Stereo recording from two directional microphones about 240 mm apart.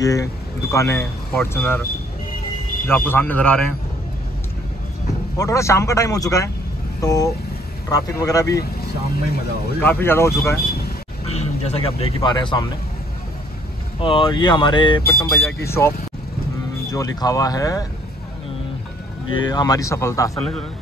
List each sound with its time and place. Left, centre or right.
0.0 s speech: centre
2.9 s speech: centre
5.4 s speech: centre
9.8 s speech: centre
11.2 s speech: left
14.0 s speech: left
16.9 s speech: centre
19.3 s speech: centre